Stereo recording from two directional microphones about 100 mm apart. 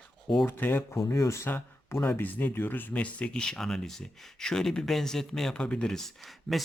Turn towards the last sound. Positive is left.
turn(degrees=0)  # may be behind; listen again after turning